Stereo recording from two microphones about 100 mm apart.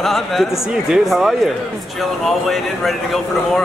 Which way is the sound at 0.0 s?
Centre (ahead or behind).